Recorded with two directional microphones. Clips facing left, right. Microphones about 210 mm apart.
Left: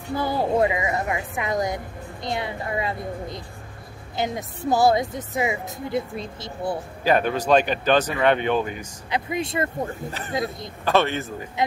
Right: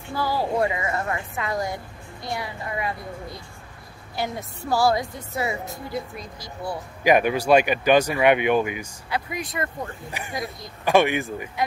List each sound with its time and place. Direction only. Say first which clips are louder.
0.1 s a woman's voice: left 2 dB; 20° left (ahead or behind)
4.2 s a woman's voice: left 3 dB; 20° left (ahead or behind)
7.0 s speech: right 2 dB; 15° right (ahead or behind)
9.1 s a woman's voice: left 4 dB; 25° left (ahead or behind)
10.9 s speech: right 2 dB; 15° right (ahead or behind)